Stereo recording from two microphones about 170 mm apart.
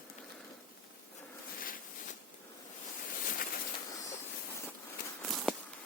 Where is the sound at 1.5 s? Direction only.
55° left (ahead or behind).